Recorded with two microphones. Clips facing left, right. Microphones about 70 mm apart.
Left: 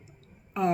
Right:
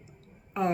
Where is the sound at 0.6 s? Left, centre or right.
Right.